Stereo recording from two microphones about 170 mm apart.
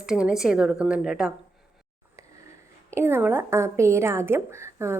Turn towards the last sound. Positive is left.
turn(degrees=-15)  # may be behind; listen again after turning